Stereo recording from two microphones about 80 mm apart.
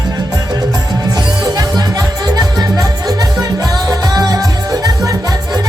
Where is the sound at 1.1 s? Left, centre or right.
Right.